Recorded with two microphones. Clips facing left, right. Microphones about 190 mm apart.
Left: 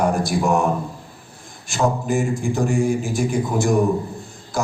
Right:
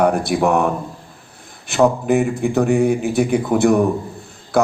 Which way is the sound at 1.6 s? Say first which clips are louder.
Right 6 dB; 60° right (ahead or behind).